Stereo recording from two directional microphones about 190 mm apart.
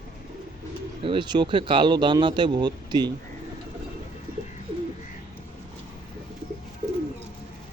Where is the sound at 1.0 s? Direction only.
25° right (ahead or behind).